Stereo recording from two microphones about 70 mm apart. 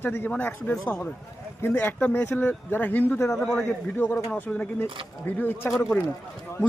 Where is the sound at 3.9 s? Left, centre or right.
Left.